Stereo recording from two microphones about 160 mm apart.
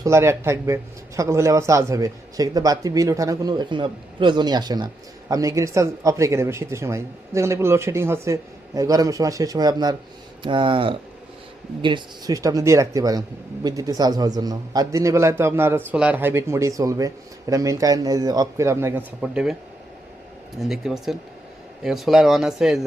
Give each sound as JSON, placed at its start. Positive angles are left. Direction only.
{"t": 0.0, "sound": "a man's voice", "side_deg": -15}
{"t": 19.2, "sound": "speech", "side_deg": -5}
{"t": 20.6, "sound": "speech", "side_deg": 0}